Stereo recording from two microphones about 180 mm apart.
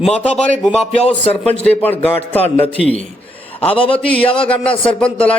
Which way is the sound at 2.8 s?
35° left (ahead or behind).